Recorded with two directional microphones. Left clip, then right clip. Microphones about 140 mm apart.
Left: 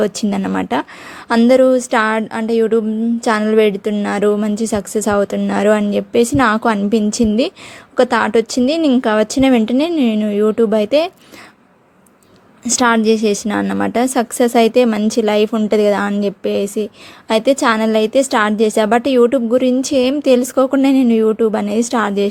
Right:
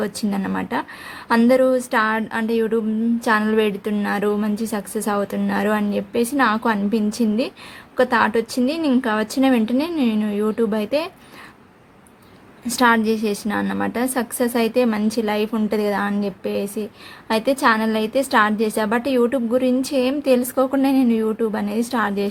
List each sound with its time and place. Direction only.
0.0 s a woman's voice: 60° left (ahead or behind)
12.6 s a woman's voice: 55° left (ahead or behind)